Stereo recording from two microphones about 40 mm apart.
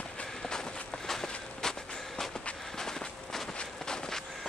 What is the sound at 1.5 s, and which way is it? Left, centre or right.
Walk, centre.